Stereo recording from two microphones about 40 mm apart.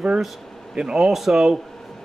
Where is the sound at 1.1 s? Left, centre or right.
Centre.